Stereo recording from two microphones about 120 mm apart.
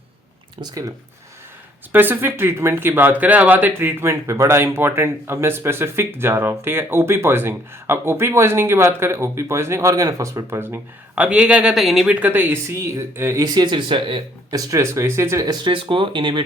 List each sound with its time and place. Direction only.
0.6 s speech: 30° right (ahead or behind)
1.9 s speech: 15° right (ahead or behind)
12.2 s speech: 15° right (ahead or behind); by 14.2 s 45° right (ahead or behind)
14.5 s speech: 25° right (ahead or behind)
15.6 s speech: 45° right (ahead or behind)